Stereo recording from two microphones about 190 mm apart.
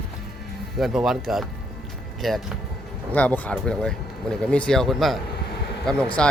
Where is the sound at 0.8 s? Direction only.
Centre (ahead or behind).